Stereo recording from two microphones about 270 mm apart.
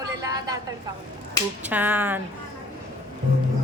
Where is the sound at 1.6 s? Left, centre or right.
Centre.